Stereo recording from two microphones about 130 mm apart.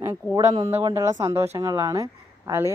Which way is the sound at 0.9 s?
30° right (ahead or behind).